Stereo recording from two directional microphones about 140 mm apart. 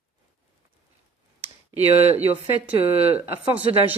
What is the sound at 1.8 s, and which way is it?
Speech, 45° right (ahead or behind).